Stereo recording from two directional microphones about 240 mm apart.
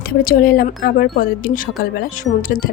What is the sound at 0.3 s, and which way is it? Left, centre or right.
Speech, left.